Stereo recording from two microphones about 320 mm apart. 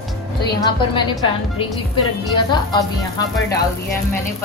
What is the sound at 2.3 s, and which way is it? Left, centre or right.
Speech, centre.